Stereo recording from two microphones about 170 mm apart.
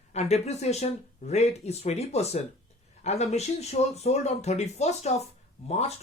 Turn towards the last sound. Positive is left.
turn(degrees=40)  # may be behind; listen again after turning